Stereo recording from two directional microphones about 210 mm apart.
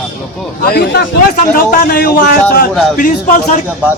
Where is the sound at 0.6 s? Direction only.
45° left (ahead or behind).